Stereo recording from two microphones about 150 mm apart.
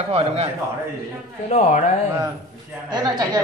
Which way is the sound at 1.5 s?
50° left (ahead or behind).